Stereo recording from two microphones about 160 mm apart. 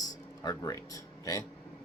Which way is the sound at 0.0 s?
25° left (ahead or behind).